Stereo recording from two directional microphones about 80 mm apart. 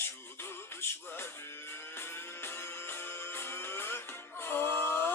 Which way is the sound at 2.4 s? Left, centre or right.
Left.